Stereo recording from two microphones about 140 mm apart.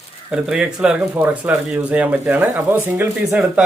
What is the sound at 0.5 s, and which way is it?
Speech, 5° right (ahead or behind).